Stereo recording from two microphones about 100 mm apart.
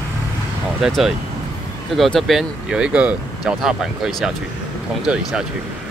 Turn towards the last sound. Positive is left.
turn(degrees=-10)  # may be behind; listen again after turning